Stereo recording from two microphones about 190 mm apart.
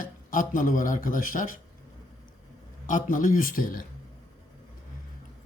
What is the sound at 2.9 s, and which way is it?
A man's voice, 45° left (ahead or behind).